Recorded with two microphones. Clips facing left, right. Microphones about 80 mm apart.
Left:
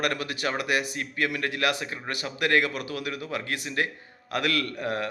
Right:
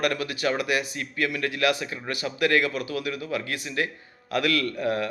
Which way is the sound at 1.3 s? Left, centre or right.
Left.